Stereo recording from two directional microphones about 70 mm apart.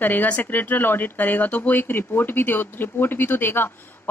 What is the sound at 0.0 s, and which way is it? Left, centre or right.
Speech, left.